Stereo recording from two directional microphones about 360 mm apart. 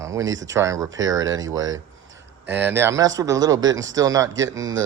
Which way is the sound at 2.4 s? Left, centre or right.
Centre.